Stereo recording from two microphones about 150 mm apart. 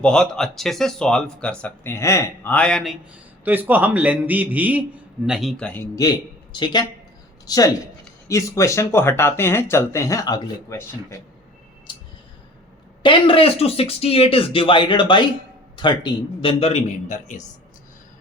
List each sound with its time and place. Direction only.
0.0 s speech: 5° left (ahead or behind)
3.4 s a man's voice: 10° right (ahead or behind); by 5.9 s 10° left (ahead or behind)
6.0 s speech: 25° left (ahead or behind)
11.9 s a sound: 30° left (ahead or behind)
13.0 s speech: 35° left (ahead or behind); by 17.4 s 55° left (ahead or behind)